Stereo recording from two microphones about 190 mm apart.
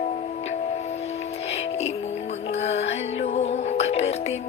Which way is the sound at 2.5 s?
35° left (ahead or behind).